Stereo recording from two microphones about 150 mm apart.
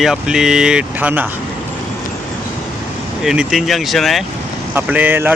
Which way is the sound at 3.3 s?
5° right (ahead or behind).